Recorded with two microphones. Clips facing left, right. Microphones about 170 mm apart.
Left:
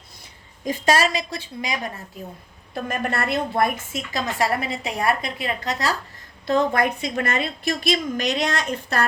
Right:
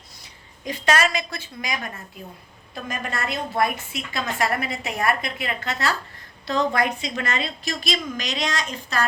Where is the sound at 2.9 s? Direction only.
60° left (ahead or behind); by 6.0 s 35° left (ahead or behind).